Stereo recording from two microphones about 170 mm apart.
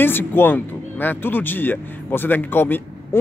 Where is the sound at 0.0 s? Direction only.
10° left (ahead or behind).